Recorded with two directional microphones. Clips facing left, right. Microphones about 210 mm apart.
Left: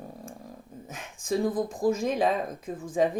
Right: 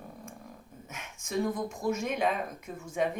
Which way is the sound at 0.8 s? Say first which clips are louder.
Left 8 dB; 35° left (ahead or behind).